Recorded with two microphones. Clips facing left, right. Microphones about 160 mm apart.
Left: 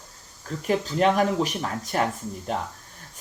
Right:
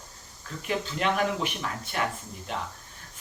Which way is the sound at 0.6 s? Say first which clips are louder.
Left 7 dB; 40° left (ahead or behind).